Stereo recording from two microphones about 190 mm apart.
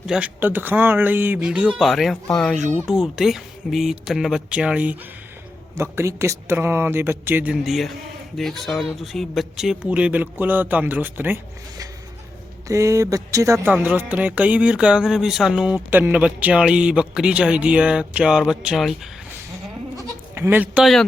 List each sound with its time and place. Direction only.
0.1 s speech: 10° right (ahead or behind)
12.6 s speech: 15° right (ahead or behind)
20.0 s bleat: 10° right (ahead or behind)